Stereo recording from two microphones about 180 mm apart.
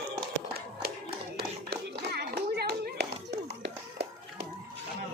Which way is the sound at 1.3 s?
65° right (ahead or behind).